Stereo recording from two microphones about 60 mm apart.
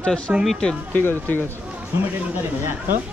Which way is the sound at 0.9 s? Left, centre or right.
Left.